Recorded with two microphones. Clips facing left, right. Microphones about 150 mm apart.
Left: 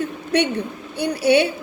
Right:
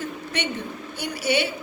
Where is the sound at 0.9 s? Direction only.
65° left (ahead or behind).